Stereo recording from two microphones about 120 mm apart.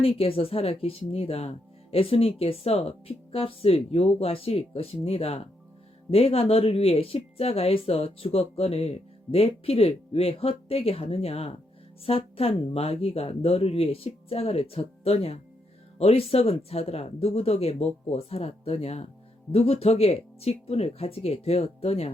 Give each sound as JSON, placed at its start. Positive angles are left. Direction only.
{"t": 0.0, "sound": "speech", "side_deg": 55}